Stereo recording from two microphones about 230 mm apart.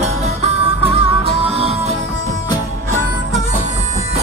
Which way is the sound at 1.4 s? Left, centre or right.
Right.